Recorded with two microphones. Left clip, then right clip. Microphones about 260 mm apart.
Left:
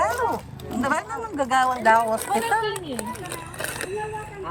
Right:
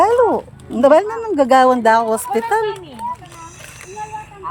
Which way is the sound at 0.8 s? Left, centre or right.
Right.